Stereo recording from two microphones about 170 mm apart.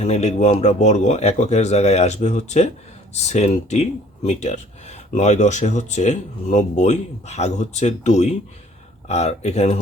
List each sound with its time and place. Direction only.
0.0 s speech: 40° left (ahead or behind)